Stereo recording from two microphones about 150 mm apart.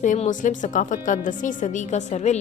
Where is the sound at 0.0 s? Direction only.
55° left (ahead or behind).